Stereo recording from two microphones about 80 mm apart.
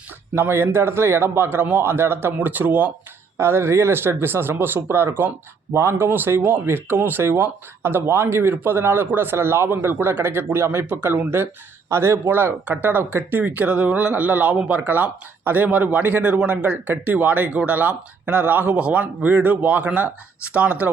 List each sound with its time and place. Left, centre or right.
0.3 s speech: right